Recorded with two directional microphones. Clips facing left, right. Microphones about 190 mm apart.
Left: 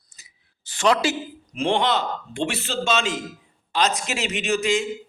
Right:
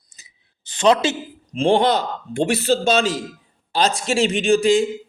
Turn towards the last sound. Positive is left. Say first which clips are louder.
# right 7 dB
turn(degrees=-35)  # may be behind; listen again after turning